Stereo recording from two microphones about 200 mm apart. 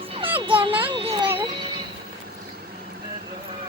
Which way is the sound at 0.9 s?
25° right (ahead or behind).